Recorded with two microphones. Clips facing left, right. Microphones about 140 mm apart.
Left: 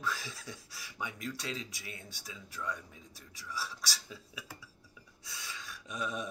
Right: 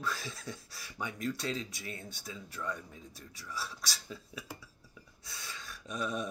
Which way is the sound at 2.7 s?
45° right (ahead or behind).